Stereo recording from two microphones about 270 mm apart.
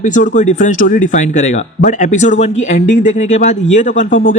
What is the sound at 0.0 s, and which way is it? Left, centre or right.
Speech, left.